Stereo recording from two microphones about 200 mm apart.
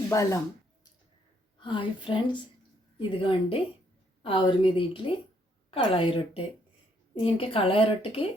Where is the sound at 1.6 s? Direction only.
25° left (ahead or behind).